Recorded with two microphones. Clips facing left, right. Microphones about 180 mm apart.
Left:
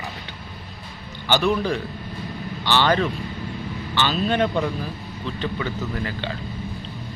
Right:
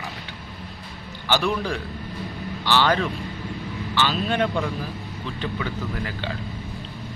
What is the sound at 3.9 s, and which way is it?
Speech, 5° right (ahead or behind).